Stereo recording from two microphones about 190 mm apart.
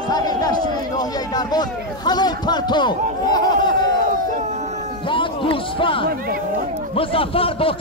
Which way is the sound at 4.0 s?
45° right (ahead or behind).